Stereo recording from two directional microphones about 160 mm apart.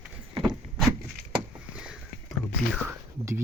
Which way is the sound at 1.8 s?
5° right (ahead or behind).